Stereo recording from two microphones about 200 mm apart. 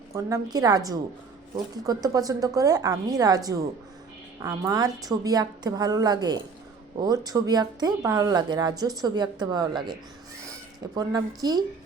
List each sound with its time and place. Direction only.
0.1 s a woman's voice: 15° right (ahead or behind)